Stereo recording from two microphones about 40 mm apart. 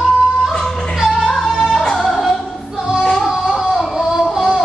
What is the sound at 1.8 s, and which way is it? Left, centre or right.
Music, centre.